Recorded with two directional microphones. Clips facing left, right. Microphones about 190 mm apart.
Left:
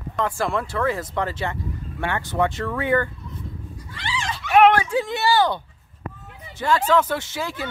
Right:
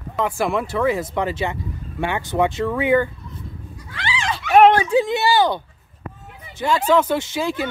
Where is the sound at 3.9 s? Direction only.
85° right.